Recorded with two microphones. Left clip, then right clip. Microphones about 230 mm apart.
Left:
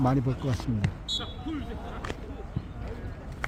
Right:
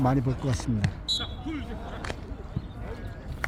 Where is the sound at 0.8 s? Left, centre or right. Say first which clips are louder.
Right 5 dB; right.